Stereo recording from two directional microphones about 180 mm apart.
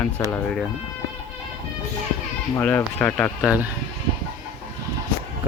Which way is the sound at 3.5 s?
10° right (ahead or behind).